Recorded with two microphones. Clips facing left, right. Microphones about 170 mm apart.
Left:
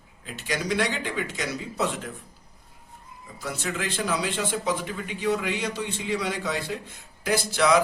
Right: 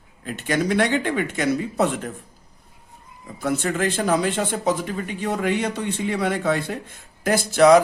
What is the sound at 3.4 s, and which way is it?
Speech, 55° right (ahead or behind).